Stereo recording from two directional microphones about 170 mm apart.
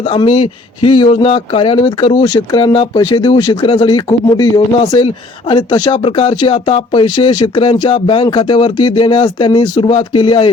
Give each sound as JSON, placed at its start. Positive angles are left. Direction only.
{"t": 0.1, "sound": "speech", "side_deg": 30}
{"t": 4.9, "sound": "speech", "side_deg": 35}